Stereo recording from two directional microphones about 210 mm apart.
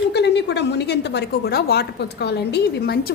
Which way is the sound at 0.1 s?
55° left (ahead or behind).